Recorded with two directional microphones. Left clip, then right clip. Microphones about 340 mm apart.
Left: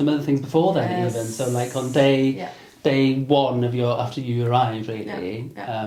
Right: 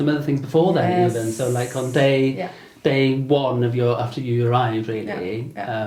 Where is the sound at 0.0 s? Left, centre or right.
Centre.